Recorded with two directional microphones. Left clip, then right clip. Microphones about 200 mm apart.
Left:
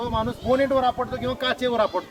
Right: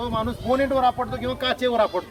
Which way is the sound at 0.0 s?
Centre (ahead or behind).